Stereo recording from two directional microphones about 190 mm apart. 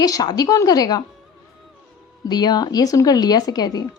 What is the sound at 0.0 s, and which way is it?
Speech, 20° left (ahead or behind).